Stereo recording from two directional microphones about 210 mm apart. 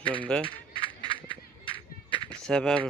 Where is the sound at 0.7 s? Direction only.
25° right (ahead or behind).